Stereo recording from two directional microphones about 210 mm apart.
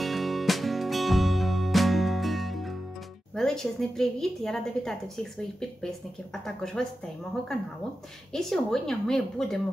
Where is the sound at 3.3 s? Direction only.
Centre (ahead or behind).